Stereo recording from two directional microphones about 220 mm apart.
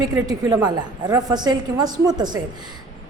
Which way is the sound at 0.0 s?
15° right (ahead or behind).